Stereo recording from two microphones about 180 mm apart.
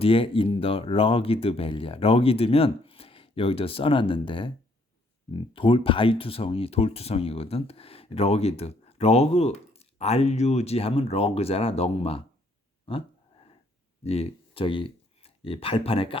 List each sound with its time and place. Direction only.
0.0 s speech: 30° left (ahead or behind)
12.9 s a sound: 30° left (ahead or behind)
14.0 s speech: 35° left (ahead or behind)